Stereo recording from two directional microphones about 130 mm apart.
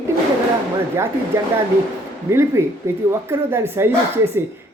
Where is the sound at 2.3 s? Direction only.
20° right (ahead or behind).